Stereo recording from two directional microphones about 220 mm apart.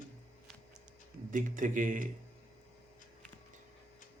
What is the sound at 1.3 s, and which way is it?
Speech, 35° right (ahead or behind).